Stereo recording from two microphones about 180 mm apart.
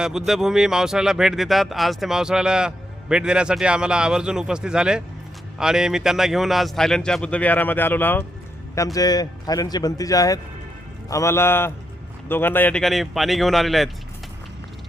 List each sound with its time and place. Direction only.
0.0 s a man's voice: centre (ahead or behind)